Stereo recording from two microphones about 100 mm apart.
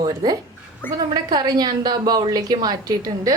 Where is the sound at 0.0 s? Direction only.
45° right (ahead or behind).